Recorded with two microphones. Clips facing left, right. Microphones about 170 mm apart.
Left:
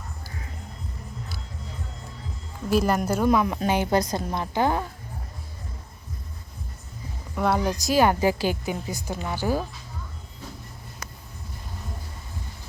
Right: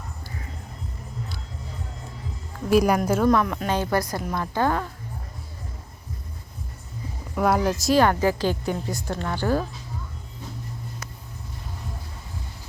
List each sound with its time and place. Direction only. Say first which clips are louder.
2.6 s speech: right 3 dB; centre (ahead or behind)
3.3 s a woman's voice: even; 20° left (ahead or behind)
7.3 s speech: right 2 dB; 5° right (ahead or behind)
8.0 s a woman's voice: even; 15° left (ahead or behind)